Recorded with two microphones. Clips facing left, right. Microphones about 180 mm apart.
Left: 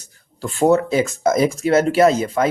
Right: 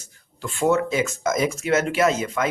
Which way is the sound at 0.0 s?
35° left (ahead or behind).